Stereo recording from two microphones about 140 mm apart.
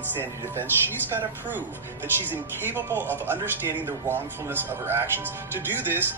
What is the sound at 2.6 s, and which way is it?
Speech, 15° right (ahead or behind).